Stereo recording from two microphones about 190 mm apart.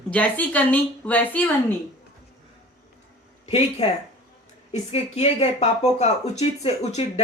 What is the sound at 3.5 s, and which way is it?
Speech, 35° left (ahead or behind).